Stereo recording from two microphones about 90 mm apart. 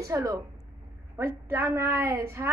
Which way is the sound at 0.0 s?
40° right (ahead or behind).